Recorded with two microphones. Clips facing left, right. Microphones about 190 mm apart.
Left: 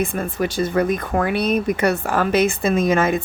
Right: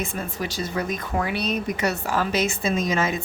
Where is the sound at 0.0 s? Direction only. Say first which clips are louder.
Left 7 dB; 55° left (ahead or behind).